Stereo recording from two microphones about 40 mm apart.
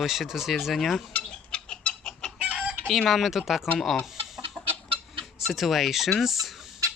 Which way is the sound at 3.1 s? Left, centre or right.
Centre.